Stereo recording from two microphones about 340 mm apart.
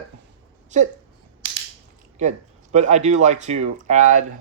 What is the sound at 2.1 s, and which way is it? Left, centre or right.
Speech, centre.